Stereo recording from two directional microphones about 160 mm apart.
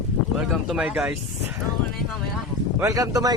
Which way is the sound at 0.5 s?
5° right (ahead or behind).